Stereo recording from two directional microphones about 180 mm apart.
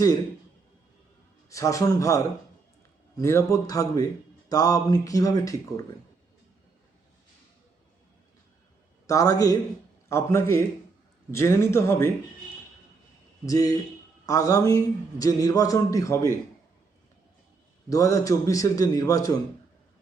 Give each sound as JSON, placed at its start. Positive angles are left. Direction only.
{"t": 1.5, "sound": "a man's voice", "side_deg": 15}
{"t": 9.0, "sound": "a man's voice", "side_deg": 20}
{"t": 13.4, "sound": "a man's voice", "side_deg": 20}
{"t": 17.8, "sound": "a man's voice", "side_deg": 20}